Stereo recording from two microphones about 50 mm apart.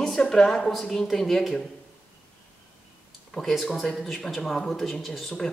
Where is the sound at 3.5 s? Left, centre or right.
Centre.